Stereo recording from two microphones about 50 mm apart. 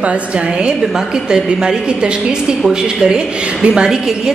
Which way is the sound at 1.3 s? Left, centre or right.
Centre.